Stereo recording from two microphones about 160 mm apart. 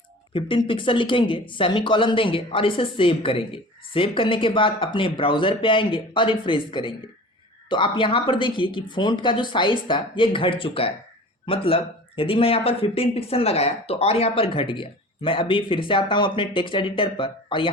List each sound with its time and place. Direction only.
0.3 s speech: 30° left (ahead or behind)